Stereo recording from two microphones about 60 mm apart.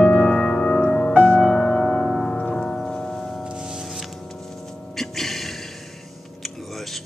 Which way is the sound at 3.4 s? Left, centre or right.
Centre.